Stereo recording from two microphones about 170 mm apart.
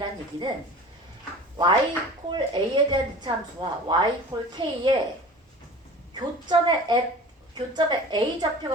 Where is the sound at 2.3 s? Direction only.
25° right (ahead or behind).